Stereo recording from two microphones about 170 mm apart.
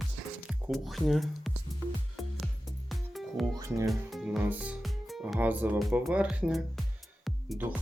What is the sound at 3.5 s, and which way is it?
Music, 20° right (ahead or behind).